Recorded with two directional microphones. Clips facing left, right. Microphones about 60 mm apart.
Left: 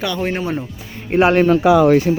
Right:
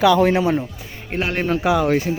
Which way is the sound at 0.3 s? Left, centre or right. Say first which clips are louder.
Right 4 dB; right.